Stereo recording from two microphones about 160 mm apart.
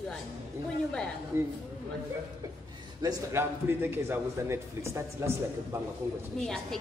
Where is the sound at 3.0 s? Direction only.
20° right (ahead or behind).